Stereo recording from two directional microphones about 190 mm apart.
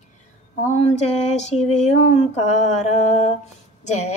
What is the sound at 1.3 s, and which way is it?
A woman's voice, 35° left (ahead or behind).